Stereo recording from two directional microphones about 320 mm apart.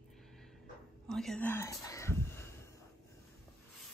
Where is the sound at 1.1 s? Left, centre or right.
Centre.